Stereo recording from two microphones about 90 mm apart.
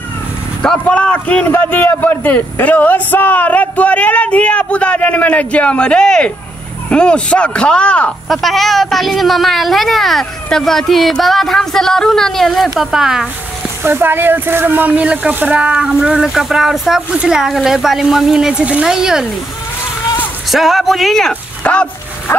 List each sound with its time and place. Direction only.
0.6 s a man's voice: 15° left (ahead or behind)
8.3 s a woman's voice: centre (ahead or behind)
13.8 s speech: 25° right (ahead or behind); by 19.2 s 5° right (ahead or behind)
20.4 s a woman's voice: centre (ahead or behind)
21.3 s speech: 15° left (ahead or behind)